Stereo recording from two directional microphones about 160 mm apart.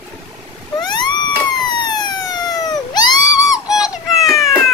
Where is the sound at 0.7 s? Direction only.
25° left (ahead or behind).